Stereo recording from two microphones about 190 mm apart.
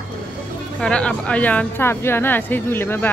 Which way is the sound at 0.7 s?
5° left (ahead or behind).